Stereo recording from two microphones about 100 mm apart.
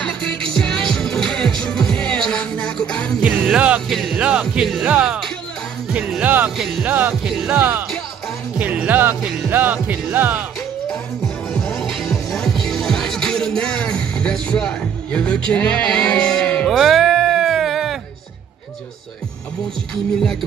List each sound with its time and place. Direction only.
0.0 s music: 5° left (ahead or behind)
3.5 s music: 10° right (ahead or behind)
3.9 s music: centre (ahead or behind)
5.0 s speech: 5° right (ahead or behind)
6.2 s speech: 15° right (ahead or behind)
7.2 s music: centre (ahead or behind)
7.5 s speech: 20° right (ahead or behind)
8.5 s music: 15° right (ahead or behind)
9.5 s speech: 20° right (ahead or behind)
11.5 s music: centre (ahead or behind)
15.1 s bleat: 10° left (ahead or behind)